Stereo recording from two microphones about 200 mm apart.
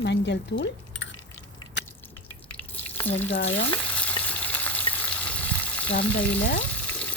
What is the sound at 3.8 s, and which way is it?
Frying, 5° left (ahead or behind).